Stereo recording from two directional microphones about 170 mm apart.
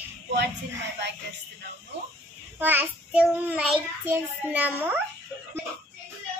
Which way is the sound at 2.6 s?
10° right (ahead or behind).